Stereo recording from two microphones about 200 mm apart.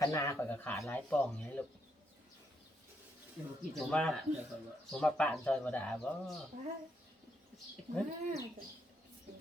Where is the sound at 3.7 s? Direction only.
Centre (ahead or behind).